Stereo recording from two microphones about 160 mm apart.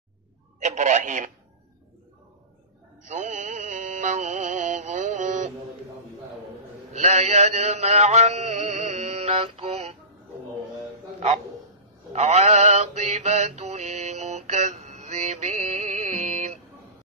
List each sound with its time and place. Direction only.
0.6 s a man's voice: 50° right (ahead or behind)
3.1 s music: 50° right (ahead or behind)
6.9 s a sound: 45° right (ahead or behind)
11.1 s speech: 45° right (ahead or behind)
12.1 s mantra: 45° right (ahead or behind)